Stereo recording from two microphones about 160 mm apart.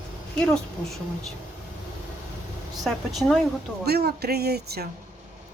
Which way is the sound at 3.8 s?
85° right.